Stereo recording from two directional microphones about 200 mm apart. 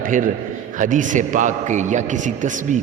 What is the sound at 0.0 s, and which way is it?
A man's voice, 40° right (ahead or behind).